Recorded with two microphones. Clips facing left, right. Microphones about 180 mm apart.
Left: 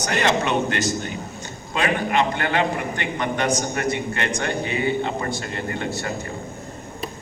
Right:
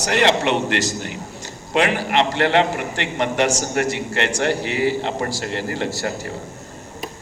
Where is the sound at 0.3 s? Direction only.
75° right (ahead or behind).